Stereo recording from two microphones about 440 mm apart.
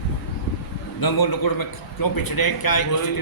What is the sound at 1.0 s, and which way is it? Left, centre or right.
A man's voice, left.